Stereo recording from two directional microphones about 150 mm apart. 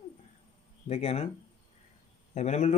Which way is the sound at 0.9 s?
45° left (ahead or behind).